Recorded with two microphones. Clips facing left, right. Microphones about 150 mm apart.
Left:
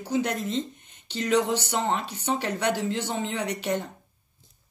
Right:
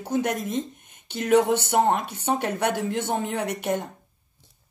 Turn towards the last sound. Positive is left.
turn(degrees=-55)  # may be behind; listen again after turning